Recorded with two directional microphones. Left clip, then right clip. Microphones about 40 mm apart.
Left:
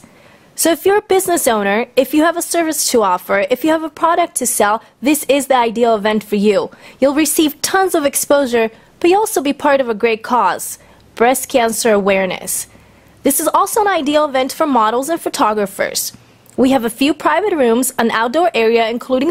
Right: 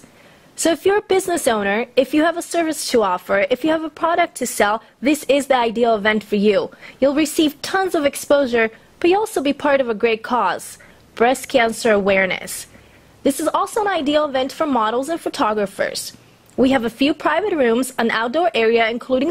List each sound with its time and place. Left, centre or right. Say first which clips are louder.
0.6 s a woman's voice: left 4 dB; left
2.0 s a woman's voice: left 4 dB; left
5.9 s a woman's voice: left 3 dB; left
7.0 s speech: left 3 dB; left
8.6 s a woman's voice: left 3 dB; left
13.3 s speech: left 5 dB; left
13.8 s a woman's voice: left 4 dB; left
14.5 s speech: left 5 dB; left
14.8 s a woman's voice: left 6 dB; left